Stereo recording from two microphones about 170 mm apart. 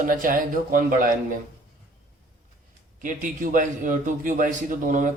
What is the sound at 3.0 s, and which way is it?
Speech, 50° right (ahead or behind).